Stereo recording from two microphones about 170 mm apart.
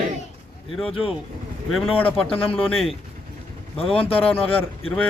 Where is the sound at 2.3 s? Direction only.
35° left (ahead or behind).